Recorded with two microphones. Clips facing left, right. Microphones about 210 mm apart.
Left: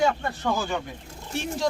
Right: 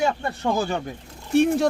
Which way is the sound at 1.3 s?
60° right (ahead or behind).